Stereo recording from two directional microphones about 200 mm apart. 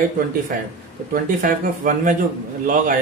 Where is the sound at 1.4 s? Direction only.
40° right (ahead or behind).